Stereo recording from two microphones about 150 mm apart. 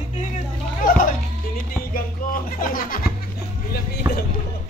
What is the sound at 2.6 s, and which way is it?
Music, 70° left (ahead or behind).